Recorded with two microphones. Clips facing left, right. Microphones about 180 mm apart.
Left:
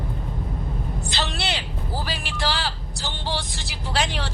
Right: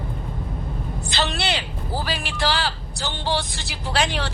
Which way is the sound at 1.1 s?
65° right (ahead or behind).